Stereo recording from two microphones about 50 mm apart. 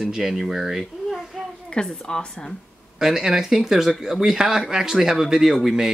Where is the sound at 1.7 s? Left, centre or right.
Centre.